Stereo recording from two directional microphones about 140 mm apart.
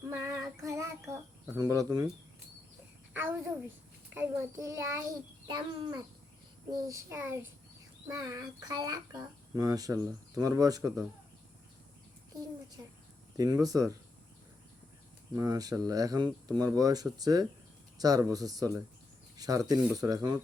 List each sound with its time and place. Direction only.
0.1 s child singing: 25° right (ahead or behind)
3.1 s a sound: 15° right (ahead or behind)
4.1 s a child's voice: 20° right (ahead or behind)
5.5 s a child's voice: 35° right (ahead or behind)
13.3 s a child's voice: 25° right (ahead or behind)
15.4 s a child's voice: 25° right (ahead or behind)